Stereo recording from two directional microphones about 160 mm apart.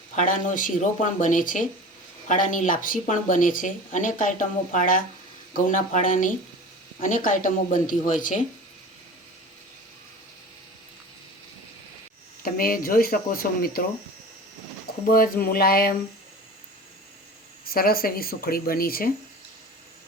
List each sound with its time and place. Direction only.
0.2 s speech: 55° left (ahead or behind)
12.4 s speech: 65° left (ahead or behind)
15.1 s speech: 65° left (ahead or behind)
17.7 s speech: 70° left (ahead or behind)